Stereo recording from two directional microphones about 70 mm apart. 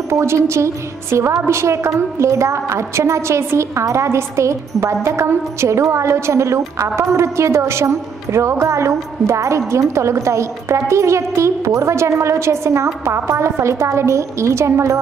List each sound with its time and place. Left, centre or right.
0.1 s a woman's voice: right